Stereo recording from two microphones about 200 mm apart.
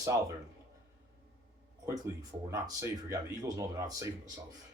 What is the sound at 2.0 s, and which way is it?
Speech, 15° right (ahead or behind).